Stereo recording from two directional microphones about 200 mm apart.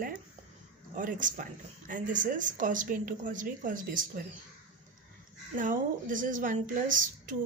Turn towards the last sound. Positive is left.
turn(degrees=-40)  # may be behind; listen again after turning